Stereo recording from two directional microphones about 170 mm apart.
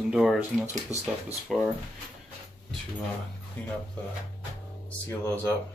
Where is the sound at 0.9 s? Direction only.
40° right (ahead or behind).